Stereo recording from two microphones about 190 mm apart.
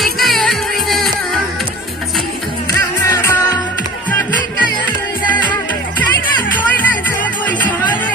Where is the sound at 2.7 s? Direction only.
15° left (ahead or behind).